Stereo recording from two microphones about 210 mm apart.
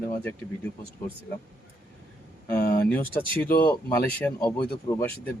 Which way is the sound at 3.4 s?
45° left (ahead or behind).